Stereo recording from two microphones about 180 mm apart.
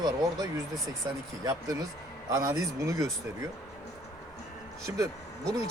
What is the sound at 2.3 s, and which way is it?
Speech, 20° right (ahead or behind).